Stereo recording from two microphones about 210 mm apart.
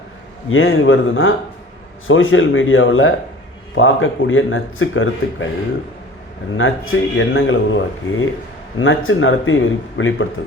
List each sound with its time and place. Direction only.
0.5 s speech: 75° left (ahead or behind)
6.6 s speech: 70° left (ahead or behind)